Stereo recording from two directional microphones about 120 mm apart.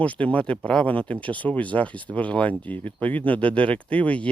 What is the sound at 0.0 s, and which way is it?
Speech, 10° left (ahead or behind).